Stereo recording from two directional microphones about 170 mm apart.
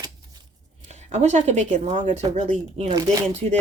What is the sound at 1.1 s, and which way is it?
Speech, 40° right (ahead or behind).